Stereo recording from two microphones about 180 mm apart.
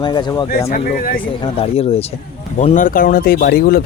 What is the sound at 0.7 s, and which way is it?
Speech, 50° left (ahead or behind).